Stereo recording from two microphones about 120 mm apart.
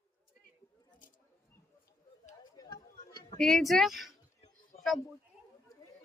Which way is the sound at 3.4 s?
Centre (ahead or behind).